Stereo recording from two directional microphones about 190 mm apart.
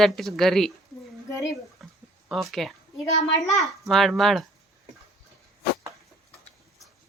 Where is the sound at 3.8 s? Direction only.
Centre (ahead or behind).